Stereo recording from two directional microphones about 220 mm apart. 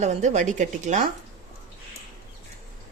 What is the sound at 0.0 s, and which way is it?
Speech, 30° right (ahead or behind).